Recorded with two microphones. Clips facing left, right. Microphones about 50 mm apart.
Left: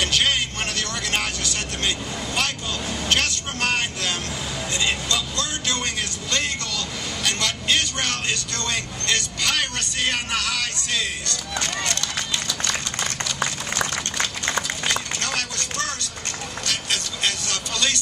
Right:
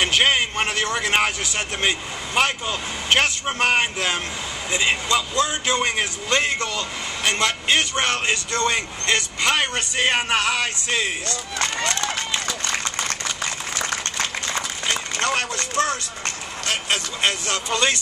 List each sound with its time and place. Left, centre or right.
0.0 s a man's voice: right
11.8 s run: right
15.1 s a sound: right
16.6 s speech: right